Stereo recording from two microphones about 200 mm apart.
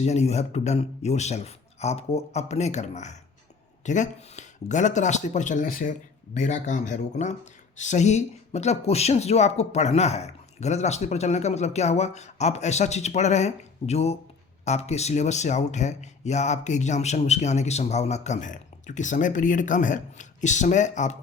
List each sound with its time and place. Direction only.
0.0 s speech: 30° left (ahead or behind)